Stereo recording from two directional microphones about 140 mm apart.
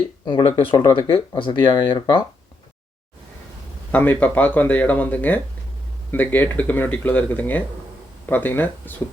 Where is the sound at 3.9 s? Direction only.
10° left (ahead or behind).